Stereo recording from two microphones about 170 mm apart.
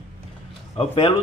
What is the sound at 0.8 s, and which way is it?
Speech, 35° left (ahead or behind).